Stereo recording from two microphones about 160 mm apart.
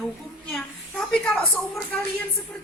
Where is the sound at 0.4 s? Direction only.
Centre (ahead or behind).